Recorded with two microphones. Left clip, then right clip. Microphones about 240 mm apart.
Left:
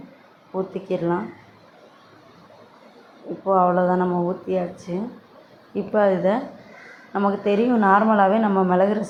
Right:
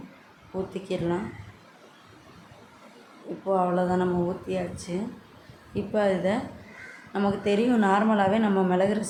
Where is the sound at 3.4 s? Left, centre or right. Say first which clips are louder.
Left 7 dB; centre.